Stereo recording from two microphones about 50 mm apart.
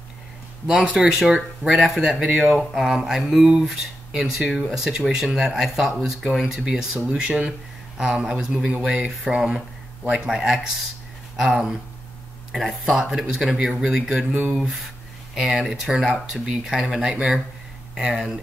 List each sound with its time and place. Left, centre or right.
0.7 s speech: right
0.9 s speech: centre
7.2 s speech: right
10.3 s speech: centre
15.3 s speech: centre